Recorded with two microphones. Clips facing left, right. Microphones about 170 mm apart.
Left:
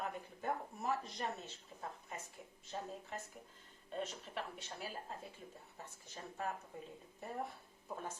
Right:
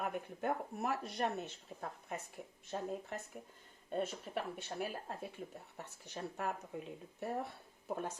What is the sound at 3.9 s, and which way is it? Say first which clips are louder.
Speech: right 5 dB; 50° right (ahead or behind).